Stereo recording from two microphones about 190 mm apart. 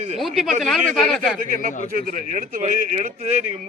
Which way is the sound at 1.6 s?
45° right (ahead or behind).